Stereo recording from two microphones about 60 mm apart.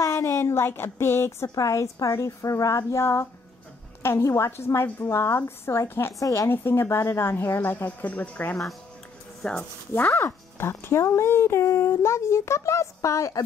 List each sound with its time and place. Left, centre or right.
0.2 s speech: left
1.5 s a woman's voice: left
2.9 s a woman's voice: left
6.1 s a woman's voice: left
6.5 s a woman's voice: left
9.4 s speech: centre
10.1 s speech: left